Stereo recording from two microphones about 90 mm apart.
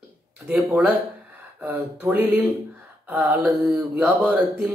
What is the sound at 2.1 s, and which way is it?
Speech, 20° right (ahead or behind).